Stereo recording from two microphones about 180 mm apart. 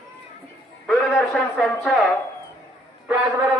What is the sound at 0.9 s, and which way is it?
A man's voice, centre (ahead or behind).